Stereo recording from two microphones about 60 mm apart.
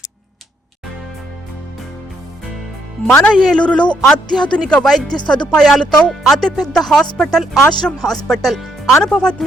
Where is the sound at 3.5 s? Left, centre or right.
Centre.